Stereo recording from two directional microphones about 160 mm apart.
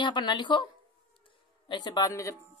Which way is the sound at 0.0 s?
30° left (ahead or behind).